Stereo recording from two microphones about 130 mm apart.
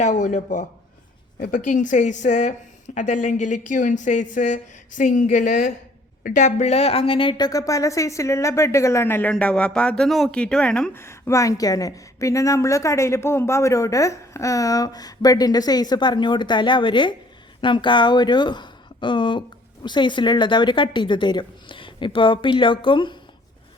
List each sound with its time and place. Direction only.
0.0 s a woman's voice: 70° left (ahead or behind)
1.5 s a woman's voice: 85° left
6.2 s a woman's voice: 70° left (ahead or behind); by 10.9 s 5° left (ahead or behind)
10.9 s a woman's voice: 20° left (ahead or behind); by 23.1 s 40° left (ahead or behind)